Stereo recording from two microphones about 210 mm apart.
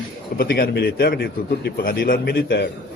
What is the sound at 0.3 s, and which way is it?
A man's voice, 45° left (ahead or behind).